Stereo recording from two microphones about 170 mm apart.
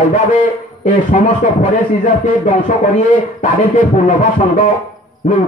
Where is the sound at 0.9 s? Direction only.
45° left (ahead or behind).